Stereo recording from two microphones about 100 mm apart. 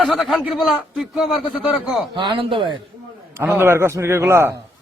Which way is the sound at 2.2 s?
55° right (ahead or behind).